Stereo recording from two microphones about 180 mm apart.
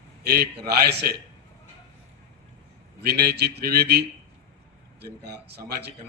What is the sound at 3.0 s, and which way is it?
A man's voice, 65° right (ahead or behind).